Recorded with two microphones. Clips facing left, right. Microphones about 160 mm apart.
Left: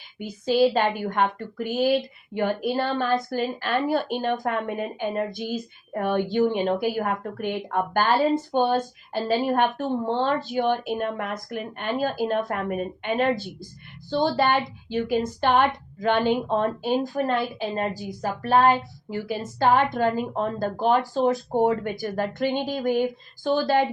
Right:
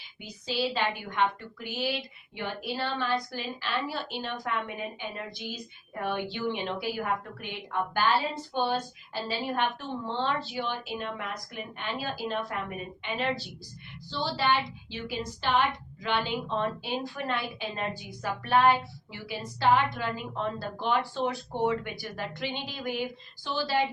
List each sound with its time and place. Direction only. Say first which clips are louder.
0.2 s a woman's voice: left 11 dB; 50° left (ahead or behind)